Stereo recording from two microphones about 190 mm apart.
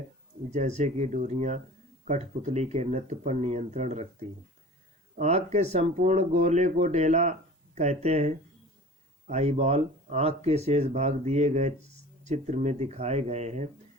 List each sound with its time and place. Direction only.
0.5 s speech: 40° right (ahead or behind)
5.1 s speech: 35° right (ahead or behind)